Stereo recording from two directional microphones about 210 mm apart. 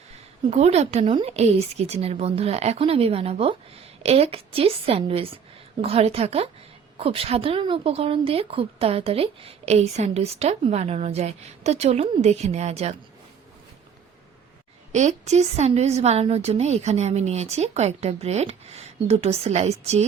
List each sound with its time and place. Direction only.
0.5 s a woman's voice: 30° right (ahead or behind)
14.9 s a woman's voice: 35° right (ahead or behind)